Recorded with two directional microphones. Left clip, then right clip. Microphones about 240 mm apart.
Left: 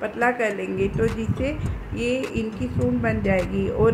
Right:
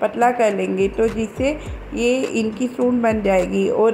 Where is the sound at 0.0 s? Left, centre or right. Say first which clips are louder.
Right 6 dB; centre.